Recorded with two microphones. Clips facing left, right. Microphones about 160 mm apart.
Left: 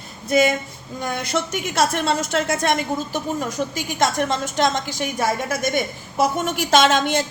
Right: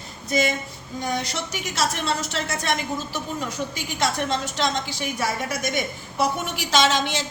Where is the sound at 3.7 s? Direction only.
45° left (ahead or behind).